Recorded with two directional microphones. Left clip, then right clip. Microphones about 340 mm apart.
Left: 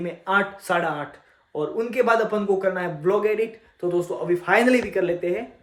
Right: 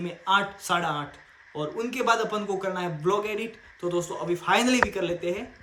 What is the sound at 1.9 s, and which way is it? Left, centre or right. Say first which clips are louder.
Speech: left 4 dB; centre.